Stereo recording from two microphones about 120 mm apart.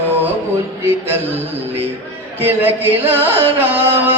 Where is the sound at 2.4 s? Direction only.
15° right (ahead or behind).